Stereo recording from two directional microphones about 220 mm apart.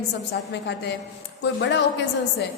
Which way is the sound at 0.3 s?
50° left (ahead or behind).